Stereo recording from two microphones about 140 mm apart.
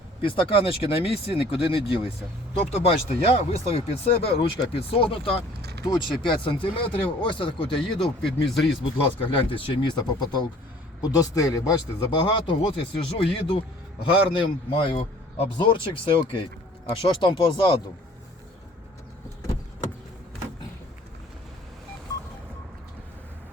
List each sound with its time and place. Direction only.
0.2 s speech: 40° left (ahead or behind)
8.0 s speech: centre (ahead or behind)
8.8 s a man's voice: 40° left (ahead or behind)